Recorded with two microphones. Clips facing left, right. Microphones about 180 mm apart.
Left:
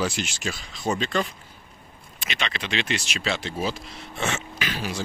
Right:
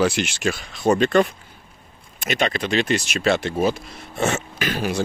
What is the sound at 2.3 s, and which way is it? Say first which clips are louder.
Speech: right 9 dB; 45° right (ahead or behind).